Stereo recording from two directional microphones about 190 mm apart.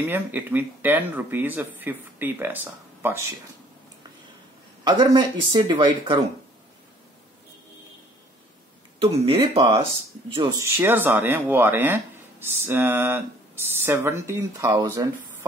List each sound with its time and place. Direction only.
0.0 s speech: 10° right (ahead or behind)
4.8 s speech: 25° right (ahead or behind)
9.0 s speech: 30° right (ahead or behind)
10.6 s speech: 10° right (ahead or behind)